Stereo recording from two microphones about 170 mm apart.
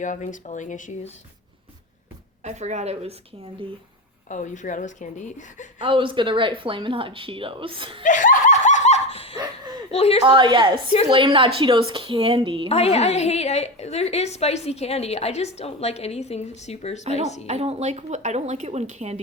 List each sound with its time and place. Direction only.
0.0 s a woman's voice: 50° left (ahead or behind)
2.4 s speech: 45° right (ahead or behind)
4.3 s a woman's voice: 45° left (ahead or behind)
5.8 s speech: 30° right (ahead or behind)
8.0 s snicker: 50° left (ahead or behind)
9.9 s a woman's voice: 35° left (ahead or behind)
10.2 s a woman's voice: 30° right (ahead or behind)
12.6 s a woman's voice: 35° left (ahead or behind)
17.4 s speech: 40° right (ahead or behind)